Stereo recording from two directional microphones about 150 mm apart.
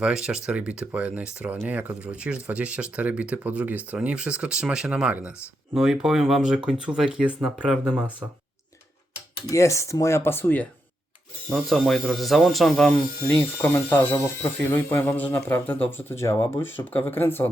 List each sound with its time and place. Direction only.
0.0 s speech: 5° right (ahead or behind)
9.5 s speech: 20° left (ahead or behind); by 12.9 s centre (ahead or behind)
13.2 s speech: 10° left (ahead or behind)